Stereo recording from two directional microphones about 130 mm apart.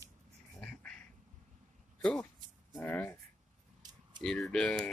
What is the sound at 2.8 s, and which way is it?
Speech, 15° left (ahead or behind).